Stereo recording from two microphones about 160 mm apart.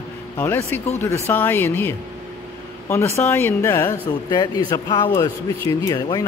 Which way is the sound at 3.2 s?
10° left (ahead or behind).